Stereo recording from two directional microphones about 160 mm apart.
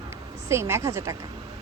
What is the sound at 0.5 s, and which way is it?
Speech, 15° right (ahead or behind).